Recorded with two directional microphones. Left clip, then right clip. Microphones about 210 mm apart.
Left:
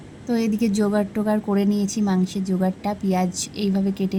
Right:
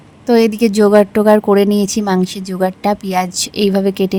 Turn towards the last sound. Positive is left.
turn(degrees=-55)  # may be behind; listen again after turning